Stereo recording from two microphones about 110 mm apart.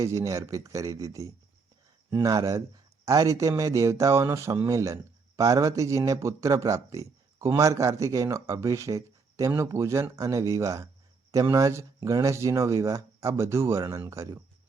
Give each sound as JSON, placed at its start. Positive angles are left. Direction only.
{"t": 0.0, "sound": "speech", "side_deg": -30}